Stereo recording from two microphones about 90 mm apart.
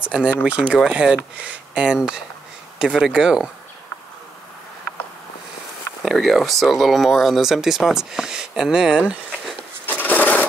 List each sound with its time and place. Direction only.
0.0 s speech: 15° right (ahead or behind)
6.0 s speech: centre (ahead or behind)
9.8 s a sound: 20° left (ahead or behind)